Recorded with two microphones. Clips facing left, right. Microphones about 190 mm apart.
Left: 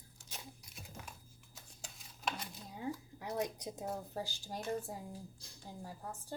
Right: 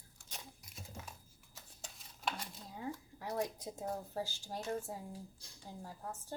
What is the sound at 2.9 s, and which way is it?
A woman's voice, 20° left (ahead or behind).